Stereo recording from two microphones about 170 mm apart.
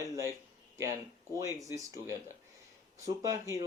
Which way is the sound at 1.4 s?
20° right (ahead or behind).